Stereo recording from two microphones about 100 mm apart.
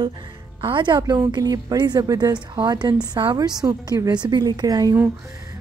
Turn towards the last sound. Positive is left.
turn(degrees=-40)  # may be behind; listen again after turning